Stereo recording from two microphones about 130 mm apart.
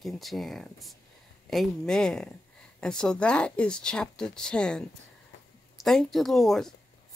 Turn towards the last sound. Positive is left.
turn(degrees=0)  # may be behind; listen again after turning